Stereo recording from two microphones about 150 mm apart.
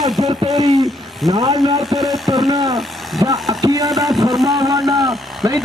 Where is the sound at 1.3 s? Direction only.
25° right (ahead or behind).